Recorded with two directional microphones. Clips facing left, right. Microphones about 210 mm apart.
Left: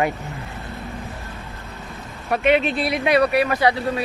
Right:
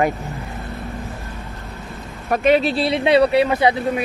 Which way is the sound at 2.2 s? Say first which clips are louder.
Right 2 dB; 40° right (ahead or behind).